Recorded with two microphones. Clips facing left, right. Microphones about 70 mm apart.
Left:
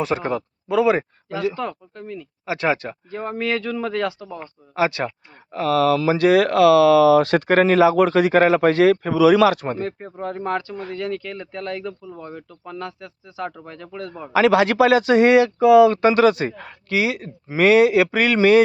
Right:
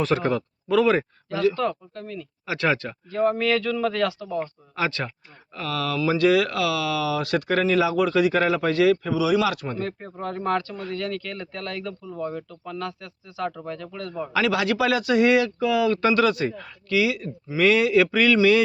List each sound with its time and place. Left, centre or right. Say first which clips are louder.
0.0 s speech: even; centre
2.5 s speech: left 2 dB; centre
5.0 s speech: left 8 dB; left
9.5 s speech: left 5 dB; left